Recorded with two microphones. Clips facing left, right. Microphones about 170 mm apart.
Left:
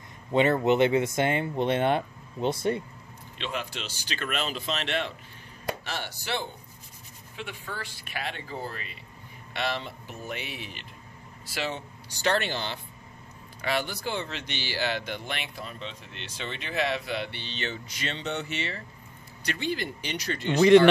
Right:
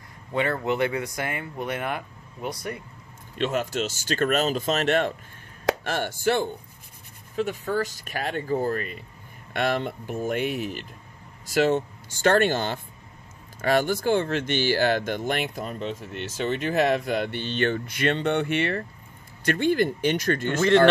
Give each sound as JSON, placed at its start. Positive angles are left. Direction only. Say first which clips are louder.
{"t": 0.3, "sound": "speech", "louder": "left 3 dB", "side_deg": 20}
{"t": 3.3, "sound": "speech", "louder": "right 9 dB", "side_deg": -45}
{"t": 20.5, "sound": "speech", "louder": "left 2 dB", "side_deg": 15}